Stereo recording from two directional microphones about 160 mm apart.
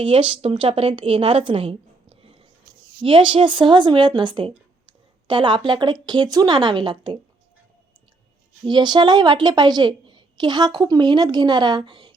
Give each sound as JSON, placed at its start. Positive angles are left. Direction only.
{"t": 0.0, "sound": "a woman's voice", "side_deg": -35}
{"t": 8.6, "sound": "speech", "side_deg": -25}